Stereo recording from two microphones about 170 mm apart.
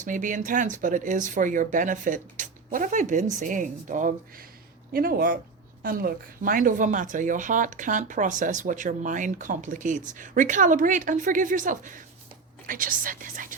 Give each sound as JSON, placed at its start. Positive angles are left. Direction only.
{"t": 0.0, "sound": "speech", "side_deg": -50}
{"t": 4.9, "sound": "speech", "side_deg": -60}